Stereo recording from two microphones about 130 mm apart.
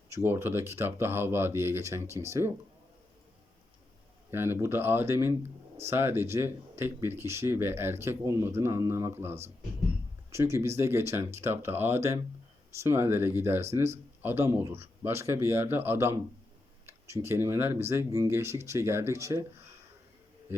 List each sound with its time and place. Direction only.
0.1 s speech: 20° right (ahead or behind)
4.3 s speech: 20° right (ahead or behind)
20.5 s a man's voice: 20° right (ahead or behind)